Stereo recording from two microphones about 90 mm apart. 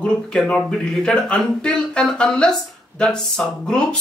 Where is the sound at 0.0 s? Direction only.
10° left (ahead or behind).